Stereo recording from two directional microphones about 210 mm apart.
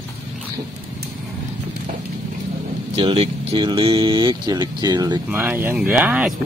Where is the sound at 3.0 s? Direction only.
25° right (ahead or behind).